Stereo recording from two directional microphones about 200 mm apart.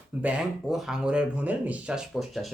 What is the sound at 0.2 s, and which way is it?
Speech, 5° right (ahead or behind).